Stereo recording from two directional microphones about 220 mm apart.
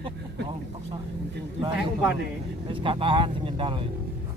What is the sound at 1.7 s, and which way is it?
Speech, 5° right (ahead or behind).